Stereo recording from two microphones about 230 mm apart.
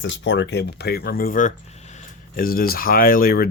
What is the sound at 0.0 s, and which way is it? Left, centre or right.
Speech, left.